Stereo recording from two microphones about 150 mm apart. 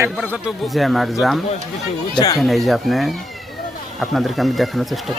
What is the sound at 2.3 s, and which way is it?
Speech, centre (ahead or behind).